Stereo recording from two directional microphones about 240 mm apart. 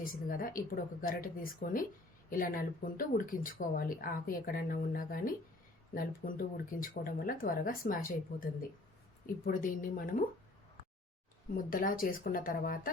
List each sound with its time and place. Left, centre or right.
0.0 s speech: left
11.5 s speech: left